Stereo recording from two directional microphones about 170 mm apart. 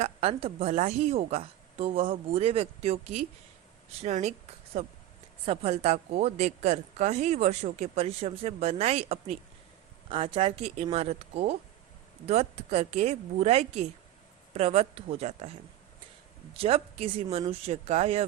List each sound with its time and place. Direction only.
0.0 s a woman's voice: 35° right (ahead or behind)
16.6 s a woman's voice: 35° right (ahead or behind)